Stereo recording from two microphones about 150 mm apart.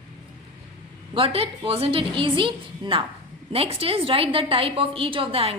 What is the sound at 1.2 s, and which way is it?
A woman's voice, 40° right (ahead or behind).